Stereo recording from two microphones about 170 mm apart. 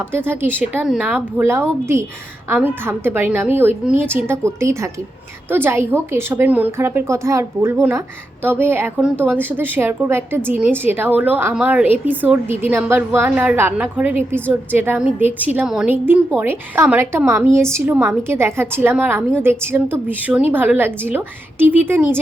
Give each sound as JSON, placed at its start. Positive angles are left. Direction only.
{"t": 0.1, "sound": "a woman's voice", "side_deg": -10}